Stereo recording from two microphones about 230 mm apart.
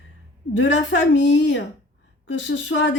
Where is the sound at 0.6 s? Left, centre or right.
Left.